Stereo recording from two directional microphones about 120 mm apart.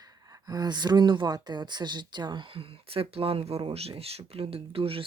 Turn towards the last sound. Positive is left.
turn(degrees=-50)  # may be behind; listen again after turning